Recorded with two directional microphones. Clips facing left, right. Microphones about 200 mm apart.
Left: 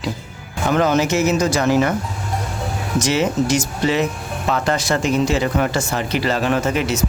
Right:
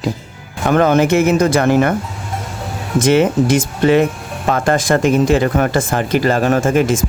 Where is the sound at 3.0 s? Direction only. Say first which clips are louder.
Right 6 dB; 55° right (ahead or behind).